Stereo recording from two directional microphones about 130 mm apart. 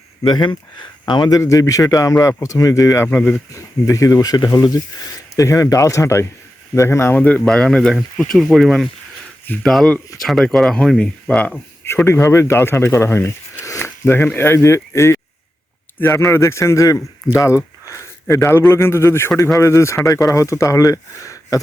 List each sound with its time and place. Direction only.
0.2 s speech: 35° left (ahead or behind)
3.1 s speech: 10° left (ahead or behind)
3.5 s a man's voice: 25° left (ahead or behind)